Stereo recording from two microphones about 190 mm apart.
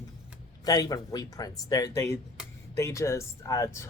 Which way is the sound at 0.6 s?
20° left (ahead or behind).